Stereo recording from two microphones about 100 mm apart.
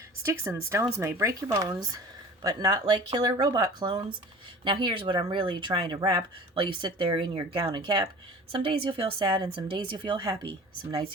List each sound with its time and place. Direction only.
0.4 s speech: 25° right (ahead or behind)
1.4 s speech: 40° right (ahead or behind)
6.5 s speech: 60° right (ahead or behind)